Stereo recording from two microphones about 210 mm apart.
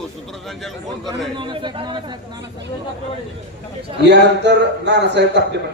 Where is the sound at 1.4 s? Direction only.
25° right (ahead or behind).